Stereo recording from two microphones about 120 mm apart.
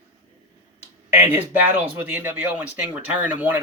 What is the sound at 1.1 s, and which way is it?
Speech, 15° right (ahead or behind).